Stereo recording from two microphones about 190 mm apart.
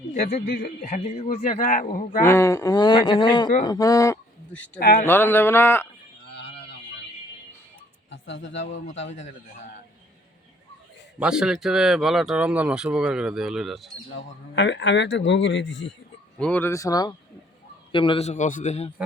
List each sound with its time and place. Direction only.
0.1 s speech: 40° left (ahead or behind)
0.4 s a man's voice: 50° left (ahead or behind)
2.2 s speech: 15° left (ahead or behind)
4.8 s a man's voice: 50° left (ahead or behind)
5.0 s a sound: 10° left (ahead or behind)
8.1 s speech: 75° left (ahead or behind)
11.2 s speech: 5° right (ahead or behind)
14.2 s speech: 70° left (ahead or behind)
16.4 s a sound: 10° left (ahead or behind)
17.9 s a man's voice: 25° left (ahead or behind)